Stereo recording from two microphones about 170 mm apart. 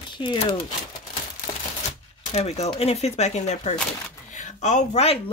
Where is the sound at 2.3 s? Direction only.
40° left (ahead or behind).